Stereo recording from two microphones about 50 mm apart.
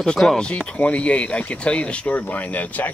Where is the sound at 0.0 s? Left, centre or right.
Centre.